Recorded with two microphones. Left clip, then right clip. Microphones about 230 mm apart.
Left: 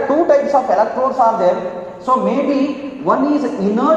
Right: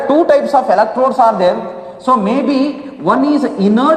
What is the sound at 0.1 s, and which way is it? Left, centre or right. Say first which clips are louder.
A man's voice: right 3 dB; right.